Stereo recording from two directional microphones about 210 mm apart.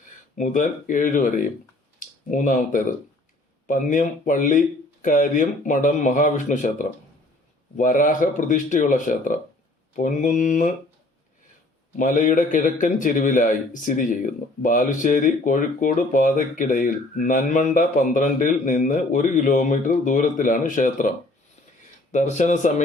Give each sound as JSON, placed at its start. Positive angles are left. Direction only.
{"t": 0.3, "sound": "speech", "side_deg": 40}
{"t": 11.9, "sound": "speech", "side_deg": 40}